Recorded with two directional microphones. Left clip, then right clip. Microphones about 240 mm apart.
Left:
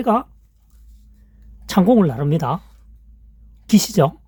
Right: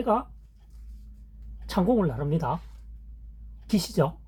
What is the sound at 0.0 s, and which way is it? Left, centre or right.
Speech, left.